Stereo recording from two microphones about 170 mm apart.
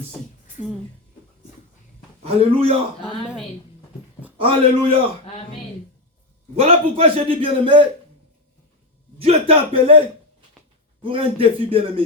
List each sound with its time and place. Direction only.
2.2 s a man's voice: 35° right (ahead or behind)
4.4 s a man's voice: 35° right (ahead or behind)
6.6 s a man's voice: 35° right (ahead or behind)
9.1 s a man's voice: 35° right (ahead or behind)
11.0 s a man's voice: 35° right (ahead or behind)